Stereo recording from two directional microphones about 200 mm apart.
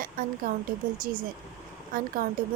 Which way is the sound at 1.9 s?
45° right (ahead or behind).